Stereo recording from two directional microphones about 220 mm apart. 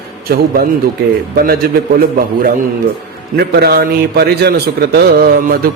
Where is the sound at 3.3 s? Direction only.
45° right (ahead or behind).